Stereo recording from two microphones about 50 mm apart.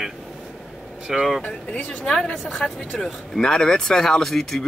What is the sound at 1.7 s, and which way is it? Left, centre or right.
Speech, left.